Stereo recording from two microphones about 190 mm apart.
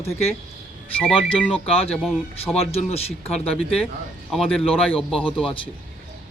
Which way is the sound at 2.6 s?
30° left (ahead or behind).